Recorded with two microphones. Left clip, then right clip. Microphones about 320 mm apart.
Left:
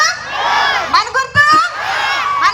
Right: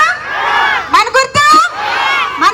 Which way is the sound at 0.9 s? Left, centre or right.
Right.